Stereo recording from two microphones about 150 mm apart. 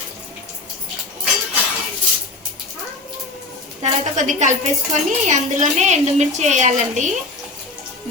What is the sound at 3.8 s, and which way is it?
A woman's voice, 55° right (ahead or behind).